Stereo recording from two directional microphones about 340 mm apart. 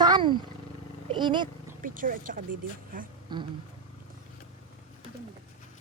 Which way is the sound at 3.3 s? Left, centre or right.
Centre.